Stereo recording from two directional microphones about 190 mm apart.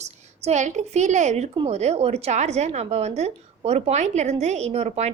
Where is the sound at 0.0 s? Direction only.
35° right (ahead or behind).